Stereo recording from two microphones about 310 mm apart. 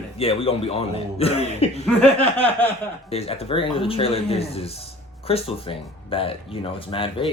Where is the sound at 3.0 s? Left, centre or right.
Centre.